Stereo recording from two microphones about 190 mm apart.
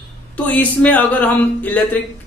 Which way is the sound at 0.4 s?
10° left (ahead or behind).